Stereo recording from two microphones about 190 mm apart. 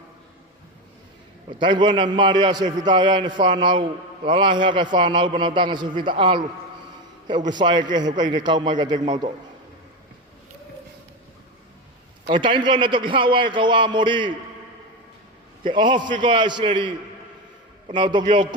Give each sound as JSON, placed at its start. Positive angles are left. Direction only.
{"t": 1.5, "sound": "a man's voice", "side_deg": -25}
{"t": 12.3, "sound": "a man's voice", "side_deg": -25}
{"t": 15.6, "sound": "a man's voice", "side_deg": -25}
{"t": 17.9, "sound": "a man's voice", "side_deg": -25}